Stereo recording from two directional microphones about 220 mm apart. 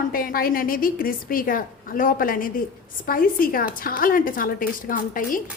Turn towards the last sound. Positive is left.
turn(degrees=40)  # may be behind; listen again after turning